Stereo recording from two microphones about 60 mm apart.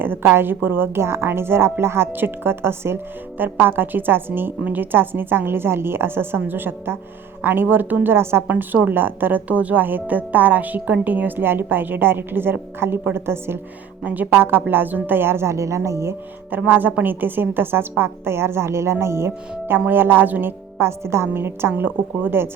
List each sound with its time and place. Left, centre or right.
0.0 s speech: right
8.4 s speech: right
14.0 s a woman's voice: right
16.5 s speech: right
21.7 s speech: right